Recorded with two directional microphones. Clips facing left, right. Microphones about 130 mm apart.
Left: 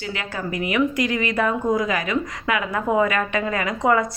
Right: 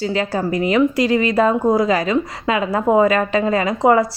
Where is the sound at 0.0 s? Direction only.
35° right (ahead or behind).